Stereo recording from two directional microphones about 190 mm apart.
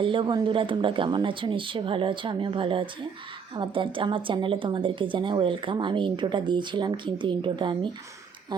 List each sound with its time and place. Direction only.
0.0 s a woman's voice: 25° right (ahead or behind)